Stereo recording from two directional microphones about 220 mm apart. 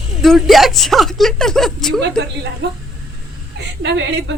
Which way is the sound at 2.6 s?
55° right (ahead or behind).